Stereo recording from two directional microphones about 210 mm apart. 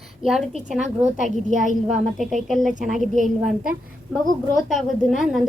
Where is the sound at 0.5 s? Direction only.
35° right (ahead or behind).